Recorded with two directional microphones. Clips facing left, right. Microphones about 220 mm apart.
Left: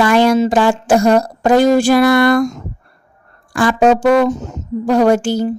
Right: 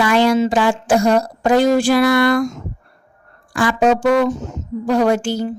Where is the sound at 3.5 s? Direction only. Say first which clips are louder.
Left 3 dB; 45° left (ahead or behind).